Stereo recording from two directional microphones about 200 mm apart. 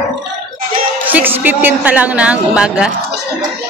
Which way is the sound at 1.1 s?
10° right (ahead or behind).